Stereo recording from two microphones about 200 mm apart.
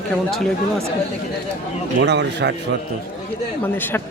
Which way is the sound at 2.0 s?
60° right (ahead or behind).